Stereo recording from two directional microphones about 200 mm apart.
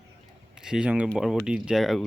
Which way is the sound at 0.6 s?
5° right (ahead or behind).